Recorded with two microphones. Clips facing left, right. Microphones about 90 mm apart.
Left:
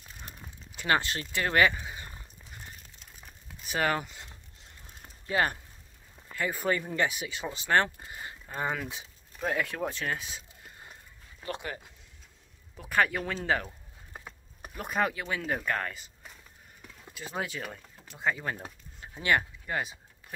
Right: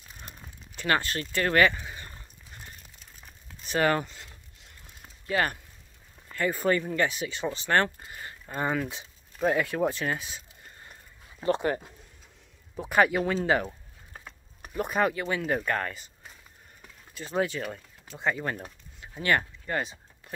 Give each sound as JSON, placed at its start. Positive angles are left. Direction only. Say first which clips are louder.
{"t": 0.7, "sound": "a sound", "louder": "right 1 dB", "side_deg": 15}
{"t": 3.3, "sound": "crumpling", "louder": "right 2 dB", "side_deg": 5}
{"t": 5.3, "sound": "speech", "louder": "right 1 dB", "side_deg": 20}
{"t": 6.2, "sound": "speech", "louder": "right 4 dB", "side_deg": 5}
{"t": 8.5, "sound": "speech", "louder": "right 4 dB", "side_deg": 0}
{"t": 11.4, "sound": "speech", "louder": "right 11 dB", "side_deg": -35}
{"t": 12.9, "sound": "speech", "louder": "right 5 dB", "side_deg": -10}
{"t": 14.1, "sound": "speech", "louder": "left 1 dB", "side_deg": 5}
{"t": 17.1, "sound": "speech", "louder": "right 7 dB", "side_deg": 5}
{"t": 19.1, "sound": "a sound", "louder": "right 1 dB", "side_deg": 10}